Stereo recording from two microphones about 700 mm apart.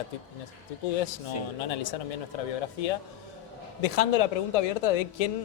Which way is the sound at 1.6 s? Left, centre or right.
Left.